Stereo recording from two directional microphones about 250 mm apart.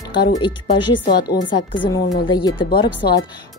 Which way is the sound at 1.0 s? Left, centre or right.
Left.